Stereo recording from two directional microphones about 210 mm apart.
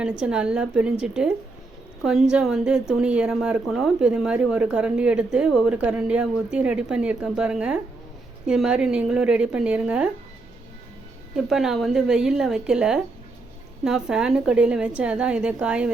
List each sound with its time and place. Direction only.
0.0 s a woman's voice: 5° right (ahead or behind)
11.3 s a woman's voice: centre (ahead or behind)